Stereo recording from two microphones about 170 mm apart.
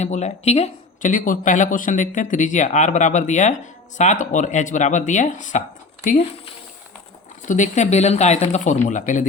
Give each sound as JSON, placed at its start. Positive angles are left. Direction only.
{"t": 0.0, "sound": "speech", "side_deg": 40}